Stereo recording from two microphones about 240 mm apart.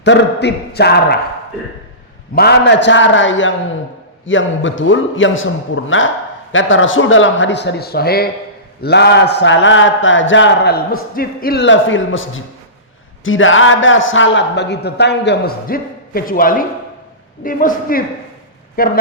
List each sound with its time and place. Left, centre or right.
0.0 s a man's voice: left
2.3 s a man's voice: left